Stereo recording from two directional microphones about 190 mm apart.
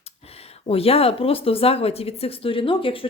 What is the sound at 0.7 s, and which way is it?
Speech, 30° left (ahead or behind).